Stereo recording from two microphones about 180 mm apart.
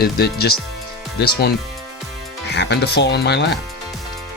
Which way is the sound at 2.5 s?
70° left (ahead or behind).